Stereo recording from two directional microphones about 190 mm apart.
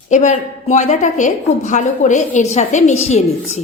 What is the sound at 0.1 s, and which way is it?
A woman's voice, 40° left (ahead or behind).